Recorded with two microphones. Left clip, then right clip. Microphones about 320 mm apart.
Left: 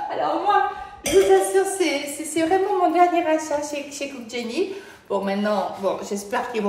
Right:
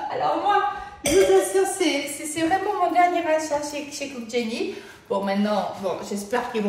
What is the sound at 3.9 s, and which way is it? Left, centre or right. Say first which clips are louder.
A woman's voice: right 2 dB; centre.